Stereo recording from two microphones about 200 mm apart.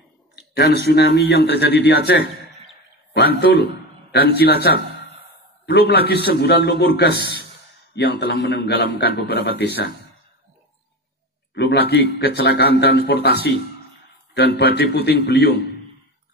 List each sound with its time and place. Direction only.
0.4 s a sound: 55° left (ahead or behind)
0.8 s a man's voice: 55° left (ahead or behind)
11.5 s a man's voice: 55° left (ahead or behind)